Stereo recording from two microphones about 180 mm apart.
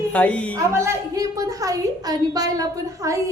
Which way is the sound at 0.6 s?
20° right (ahead or behind).